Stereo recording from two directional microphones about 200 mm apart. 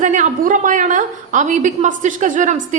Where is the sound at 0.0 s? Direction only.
40° right (ahead or behind).